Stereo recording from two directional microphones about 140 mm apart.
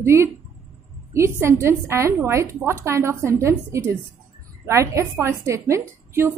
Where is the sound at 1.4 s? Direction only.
20° right (ahead or behind).